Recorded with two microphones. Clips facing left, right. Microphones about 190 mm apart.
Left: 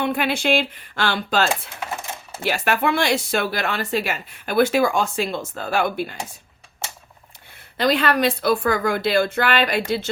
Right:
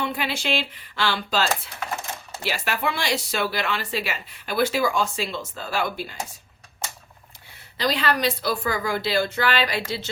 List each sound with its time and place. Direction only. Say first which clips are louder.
0.0 s speech: left 6 dB; 55° left (ahead or behind)
7.8 s speech: left 5 dB; 55° left (ahead or behind)